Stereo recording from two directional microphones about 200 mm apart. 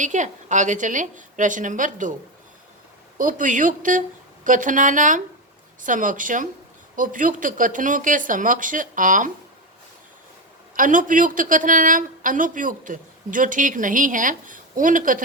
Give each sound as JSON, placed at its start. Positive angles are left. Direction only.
{"t": 0.0, "sound": "speech", "side_deg": -40}
{"t": 3.2, "sound": "speech", "side_deg": -40}
{"t": 10.8, "sound": "speech", "side_deg": -40}